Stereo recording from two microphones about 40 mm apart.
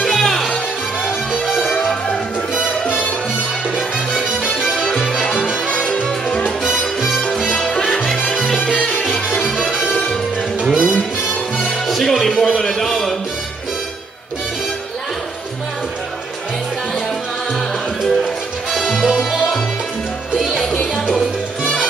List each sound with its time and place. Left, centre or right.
0.0 s music: centre
4.2 s music: centre
4.7 s music: centre
5.0 s music: centre
7.7 s music: centre
8.3 s salsa music: centre
9.8 s music: centre
10.6 s music: centre
11.9 s music: centre
12.5 s a sound: centre
18.0 s music: centre